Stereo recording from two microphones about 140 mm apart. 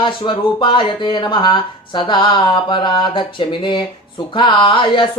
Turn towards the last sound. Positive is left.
turn(degrees=35)  # may be behind; listen again after turning